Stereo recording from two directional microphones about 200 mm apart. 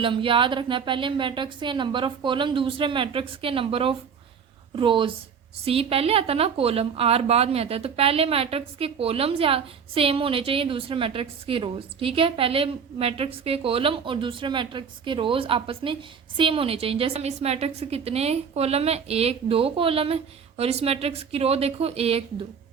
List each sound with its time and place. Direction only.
0.0 s a woman's voice: 25° right (ahead or behind)